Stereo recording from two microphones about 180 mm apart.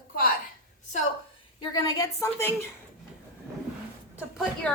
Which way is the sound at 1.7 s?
15° left (ahead or behind).